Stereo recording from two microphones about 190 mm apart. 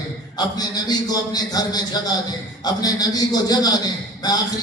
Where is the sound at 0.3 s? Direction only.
20° left (ahead or behind).